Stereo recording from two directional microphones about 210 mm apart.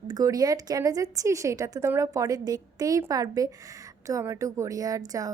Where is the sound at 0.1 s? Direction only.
15° right (ahead or behind).